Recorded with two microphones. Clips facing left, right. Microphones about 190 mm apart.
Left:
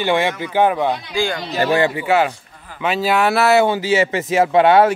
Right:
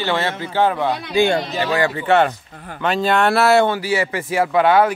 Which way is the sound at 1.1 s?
20° right (ahead or behind).